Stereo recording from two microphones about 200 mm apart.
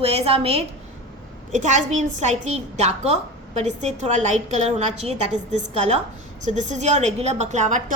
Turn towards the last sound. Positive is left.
turn(degrees=-35)  # may be behind; listen again after turning